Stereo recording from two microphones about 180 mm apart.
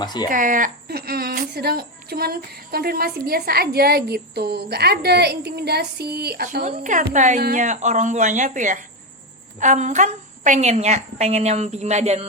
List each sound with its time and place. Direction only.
0.0 s speech: 25° left (ahead or behind)
0.3 s a woman's voice: 50° right (ahead or behind)